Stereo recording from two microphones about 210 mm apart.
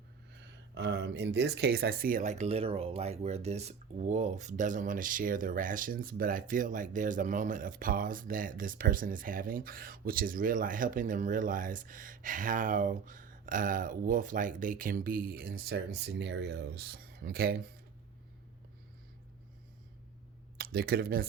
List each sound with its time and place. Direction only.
0.7 s speech: 55° right (ahead or behind)
20.6 s speech: 45° right (ahead or behind)